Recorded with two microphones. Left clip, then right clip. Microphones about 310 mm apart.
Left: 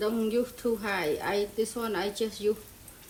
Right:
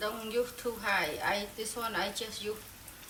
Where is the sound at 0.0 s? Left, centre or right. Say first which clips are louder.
Left 5 dB; left.